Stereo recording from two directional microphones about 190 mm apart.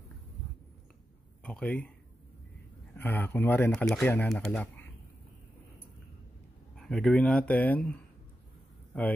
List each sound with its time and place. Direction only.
1.4 s speech: 5° left (ahead or behind)
3.0 s speech: 10° left (ahead or behind)
6.8 s speech: centre (ahead or behind)